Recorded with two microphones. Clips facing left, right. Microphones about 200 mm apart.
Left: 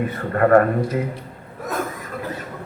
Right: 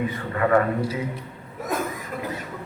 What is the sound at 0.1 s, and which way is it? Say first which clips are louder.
Speech: left 9 dB; 50° left (ahead or behind).